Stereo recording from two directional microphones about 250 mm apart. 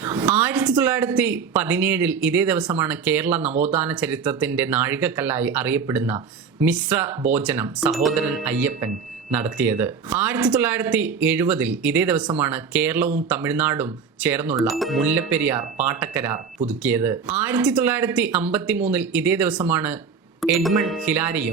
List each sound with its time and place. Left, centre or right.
0.0 s speech: centre